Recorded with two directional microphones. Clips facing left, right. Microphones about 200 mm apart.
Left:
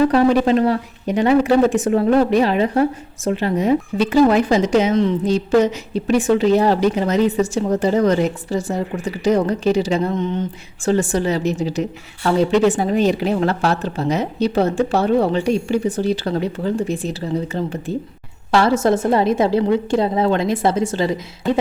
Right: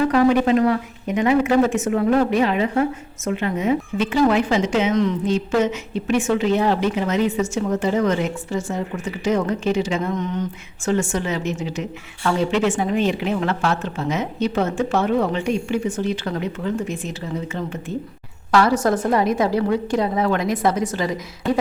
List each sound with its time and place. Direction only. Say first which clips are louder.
0.0 s a woman's voice: left 2 dB; 35° left (ahead or behind)